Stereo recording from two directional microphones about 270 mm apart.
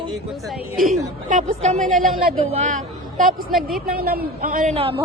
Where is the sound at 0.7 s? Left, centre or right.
Centre.